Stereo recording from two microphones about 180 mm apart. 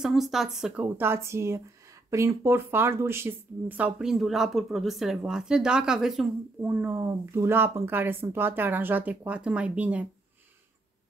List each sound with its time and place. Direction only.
0.0 s a woman's voice: centre (ahead or behind)